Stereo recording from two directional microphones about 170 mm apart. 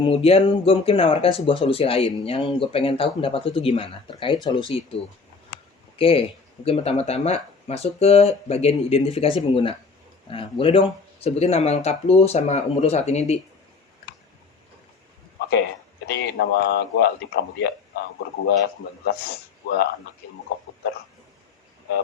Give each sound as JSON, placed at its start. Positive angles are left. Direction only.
{"t": 0.0, "sound": "speech", "side_deg": 35}
{"t": 6.0, "sound": "speech", "side_deg": 30}
{"t": 16.0, "sound": "a man's voice", "side_deg": 75}